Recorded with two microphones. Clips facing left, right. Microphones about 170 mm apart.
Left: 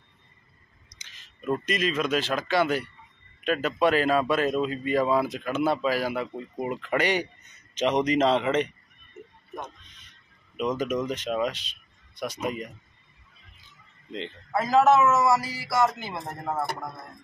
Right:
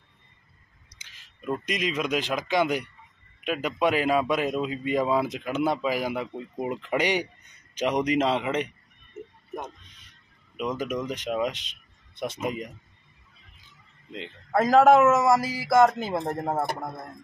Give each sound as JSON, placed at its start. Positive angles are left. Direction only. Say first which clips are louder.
{"t": 0.8, "sound": "a man's voice", "louder": "left 1 dB", "side_deg": -10}
{"t": 10.6, "sound": "a man's voice", "louder": "left 2 dB", "side_deg": -10}
{"t": 14.5, "sound": "a man's voice", "louder": "right 3 dB", "side_deg": -50}
{"t": 16.2, "sound": "speech", "louder": "right 3 dB", "side_deg": -35}